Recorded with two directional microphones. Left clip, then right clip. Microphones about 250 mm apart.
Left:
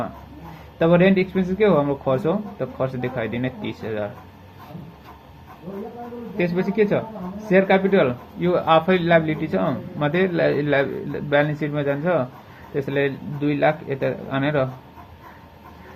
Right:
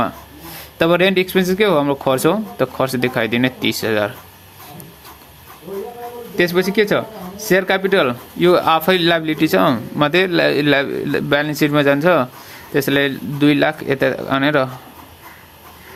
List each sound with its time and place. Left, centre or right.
0.8 s speech: right
6.3 s speech: right